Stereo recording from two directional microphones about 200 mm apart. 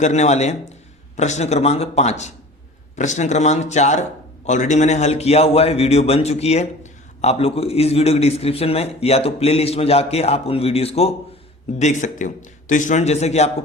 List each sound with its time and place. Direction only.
0.0 s a man's voice: 35° left (ahead or behind)